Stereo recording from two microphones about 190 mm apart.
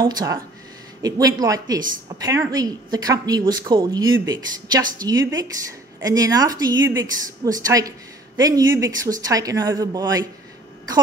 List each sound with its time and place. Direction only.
0.0 s a woman's voice: 20° right (ahead or behind)